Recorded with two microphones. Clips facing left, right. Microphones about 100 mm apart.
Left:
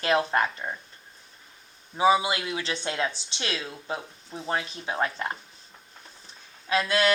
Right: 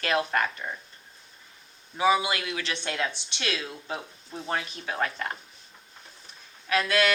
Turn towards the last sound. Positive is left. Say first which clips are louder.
# even
turn(degrees=30)  # may be behind; listen again after turning